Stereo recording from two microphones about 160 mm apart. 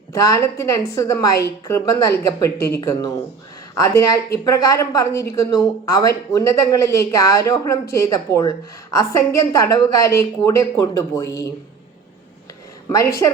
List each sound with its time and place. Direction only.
0.1 s a woman's voice: 20° left (ahead or behind)
12.9 s a woman's voice: 20° left (ahead or behind)